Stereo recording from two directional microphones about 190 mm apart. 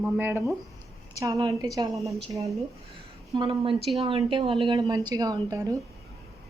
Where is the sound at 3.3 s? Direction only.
25° right (ahead or behind).